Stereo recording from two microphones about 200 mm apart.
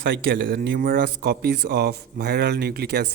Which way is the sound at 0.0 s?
50° right (ahead or behind).